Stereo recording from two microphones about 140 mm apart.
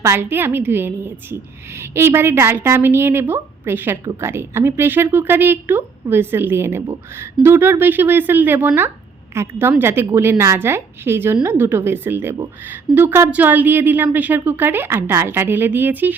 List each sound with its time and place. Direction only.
0.0 s a woman's voice: 15° right (ahead or behind)